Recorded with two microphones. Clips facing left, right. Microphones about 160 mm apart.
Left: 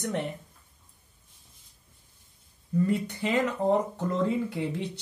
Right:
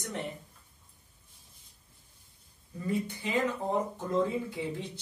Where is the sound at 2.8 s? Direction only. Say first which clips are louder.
Left 4 dB; 75° left (ahead or behind).